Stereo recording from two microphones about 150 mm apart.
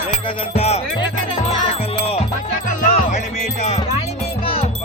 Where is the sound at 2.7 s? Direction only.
60° left (ahead or behind); by 4.8 s 40° left (ahead or behind).